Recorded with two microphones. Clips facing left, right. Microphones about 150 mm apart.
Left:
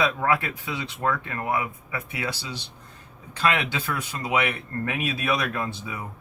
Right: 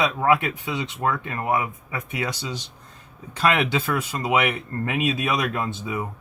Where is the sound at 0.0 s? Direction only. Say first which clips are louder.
Right 3 dB; 20° right (ahead or behind).